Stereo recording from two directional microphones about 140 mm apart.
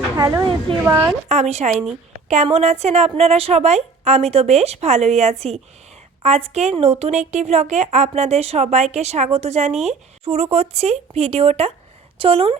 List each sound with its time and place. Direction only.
0.2 s a woman's voice: 20° right (ahead or behind)
1.3 s a woman's voice: 55° right (ahead or behind)